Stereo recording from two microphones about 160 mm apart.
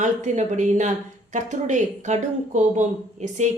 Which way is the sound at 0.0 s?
50° right (ahead or behind).